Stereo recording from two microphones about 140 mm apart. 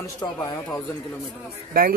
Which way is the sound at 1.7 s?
90° right.